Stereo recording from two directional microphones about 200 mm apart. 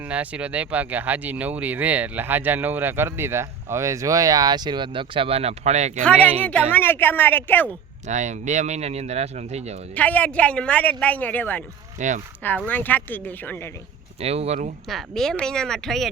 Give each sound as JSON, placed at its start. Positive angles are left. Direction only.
{"t": 0.0, "sound": "speech", "side_deg": -5}
{"t": 6.0, "sound": "speech", "side_deg": 5}
{"t": 8.0, "sound": "speech", "side_deg": -35}
{"t": 9.9, "sound": "speech", "side_deg": 10}
{"t": 11.9, "sound": "speech", "side_deg": -40}
{"t": 12.4, "sound": "speech", "side_deg": 10}
{"t": 14.2, "sound": "speech", "side_deg": -30}
{"t": 14.8, "sound": "speech", "side_deg": 0}